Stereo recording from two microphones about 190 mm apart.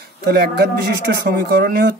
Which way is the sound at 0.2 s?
55° right (ahead or behind).